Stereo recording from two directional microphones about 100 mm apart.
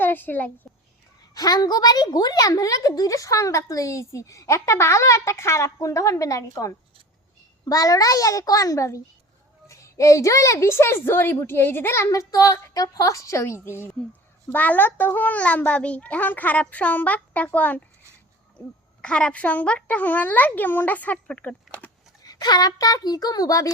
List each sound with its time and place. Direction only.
0.0 s a child's voice: 20° left (ahead or behind)
1.3 s a woman's voice: 40° left (ahead or behind)
14.5 s a child's voice: 15° left (ahead or behind)
19.0 s a child's voice: 10° left (ahead or behind)
22.2 s a woman's voice: 40° left (ahead or behind)